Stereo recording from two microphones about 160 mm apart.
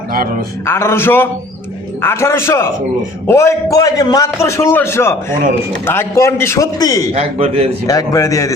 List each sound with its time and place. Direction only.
0.6 s a man's voice: 15° left (ahead or behind)
7.1 s a man's voice: 40° right (ahead or behind)
7.9 s a man's voice: 20° left (ahead or behind)